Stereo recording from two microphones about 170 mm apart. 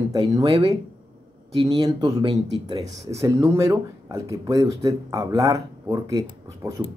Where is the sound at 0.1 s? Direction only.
25° right (ahead or behind).